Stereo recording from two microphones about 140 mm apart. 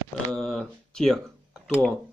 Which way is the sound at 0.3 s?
Centre (ahead or behind).